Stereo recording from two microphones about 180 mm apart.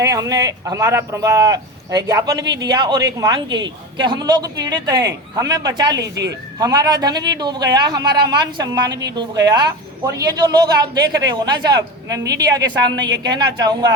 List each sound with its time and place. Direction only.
0.0 s a woman's voice: 20° right (ahead or behind)
6.0 s speech: 70° right (ahead or behind)
6.6 s a woman's voice: 20° right (ahead or behind)